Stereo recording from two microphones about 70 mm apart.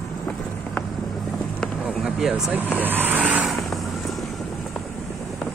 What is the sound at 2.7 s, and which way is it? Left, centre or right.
Vehicle, right.